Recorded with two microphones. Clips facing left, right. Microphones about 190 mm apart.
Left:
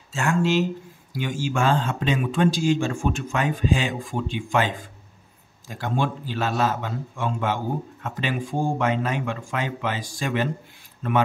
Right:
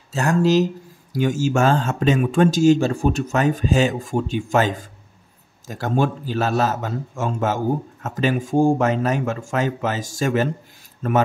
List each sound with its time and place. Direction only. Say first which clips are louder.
0.1 s a man's voice: right 5 dB; 40° right (ahead or behind)